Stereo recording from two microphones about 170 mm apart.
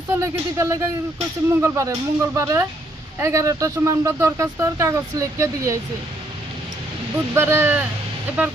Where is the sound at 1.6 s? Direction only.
15° right (ahead or behind).